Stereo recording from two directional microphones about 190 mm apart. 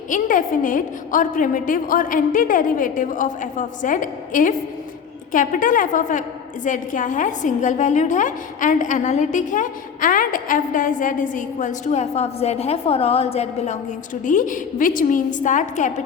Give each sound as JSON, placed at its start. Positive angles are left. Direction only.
{"t": 0.1, "sound": "a woman's voice", "side_deg": 45}